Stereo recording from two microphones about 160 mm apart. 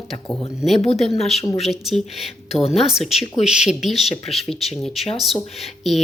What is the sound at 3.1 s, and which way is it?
Speech, 40° left (ahead or behind).